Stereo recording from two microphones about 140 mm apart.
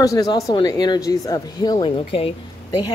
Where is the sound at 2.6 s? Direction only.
30° left (ahead or behind).